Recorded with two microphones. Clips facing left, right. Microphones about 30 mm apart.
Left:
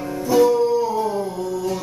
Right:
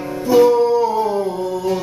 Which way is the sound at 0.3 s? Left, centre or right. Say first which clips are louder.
Right 4 dB; centre.